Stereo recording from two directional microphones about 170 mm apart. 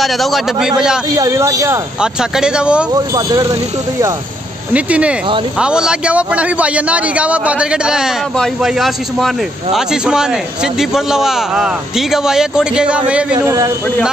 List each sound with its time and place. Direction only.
0.0 s a man's voice: centre (ahead or behind)
1.1 s speech: 20° right (ahead or behind)
2.0 s a man's voice: 5° right (ahead or behind)
2.9 s speech: 20° right (ahead or behind)
4.7 s a man's voice: 10° right (ahead or behind)